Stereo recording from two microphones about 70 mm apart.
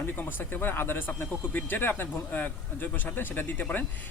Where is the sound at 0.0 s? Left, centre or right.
Left.